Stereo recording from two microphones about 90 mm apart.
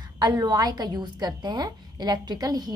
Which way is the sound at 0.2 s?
50° right (ahead or behind).